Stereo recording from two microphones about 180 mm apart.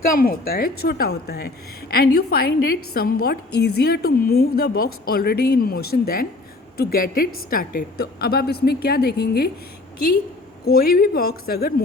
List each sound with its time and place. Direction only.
0.1 s a woman's voice: 55° left (ahead or behind)
10.7 s a woman's voice: 55° left (ahead or behind)